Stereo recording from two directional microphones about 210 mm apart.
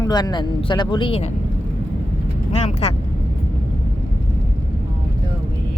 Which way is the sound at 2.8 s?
30° left (ahead or behind).